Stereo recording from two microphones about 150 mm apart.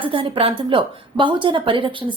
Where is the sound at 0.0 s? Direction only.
35° right (ahead or behind).